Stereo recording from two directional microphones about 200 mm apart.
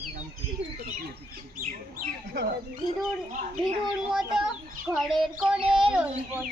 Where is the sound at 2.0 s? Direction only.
55° right (ahead or behind).